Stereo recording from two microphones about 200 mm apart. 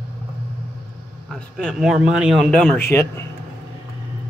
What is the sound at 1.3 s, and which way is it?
A man's voice, centre (ahead or behind).